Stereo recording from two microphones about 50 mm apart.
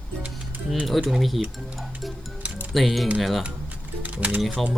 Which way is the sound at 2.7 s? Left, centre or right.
Centre.